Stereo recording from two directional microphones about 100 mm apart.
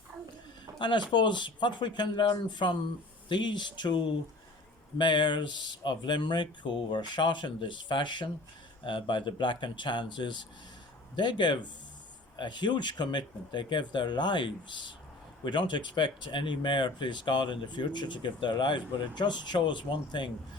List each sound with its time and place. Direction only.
0.8 s speech: 50° left (ahead or behind)